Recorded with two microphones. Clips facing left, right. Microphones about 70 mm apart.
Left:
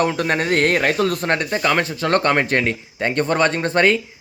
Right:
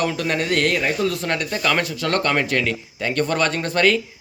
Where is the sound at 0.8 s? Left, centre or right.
Left.